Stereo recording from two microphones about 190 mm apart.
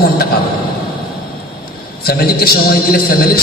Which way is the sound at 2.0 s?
55° left (ahead or behind).